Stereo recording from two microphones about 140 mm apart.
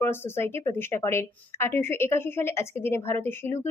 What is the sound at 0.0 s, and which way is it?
Speech, 15° left (ahead or behind).